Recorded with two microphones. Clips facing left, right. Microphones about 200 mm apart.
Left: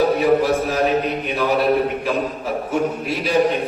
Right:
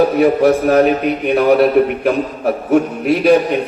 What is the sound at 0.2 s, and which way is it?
A man's voice, 60° right (ahead or behind).